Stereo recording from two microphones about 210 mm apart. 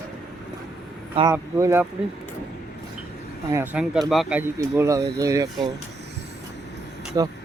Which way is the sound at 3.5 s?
10° right (ahead or behind).